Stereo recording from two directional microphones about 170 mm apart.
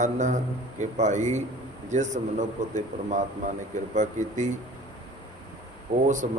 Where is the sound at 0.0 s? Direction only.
45° right (ahead or behind).